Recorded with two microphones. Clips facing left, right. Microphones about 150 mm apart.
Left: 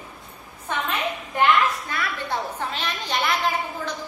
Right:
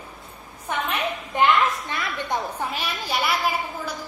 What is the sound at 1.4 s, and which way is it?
A woman's voice, 20° right (ahead or behind).